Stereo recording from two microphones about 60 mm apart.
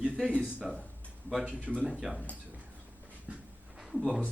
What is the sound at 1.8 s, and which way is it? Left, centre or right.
Speech, centre.